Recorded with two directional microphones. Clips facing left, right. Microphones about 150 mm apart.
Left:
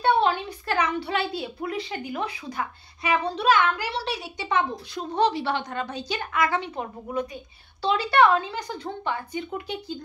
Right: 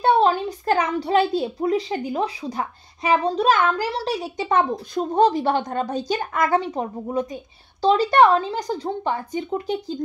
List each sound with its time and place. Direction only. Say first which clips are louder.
0.0 s a child's voice: right 4 dB; 35° right (ahead or behind)